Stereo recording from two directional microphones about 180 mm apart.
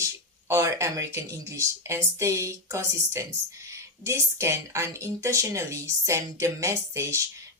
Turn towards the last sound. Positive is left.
turn(degrees=-15)  # may be behind; listen again after turning